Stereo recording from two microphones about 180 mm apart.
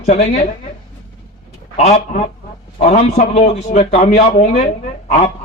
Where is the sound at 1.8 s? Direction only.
35° left (ahead or behind).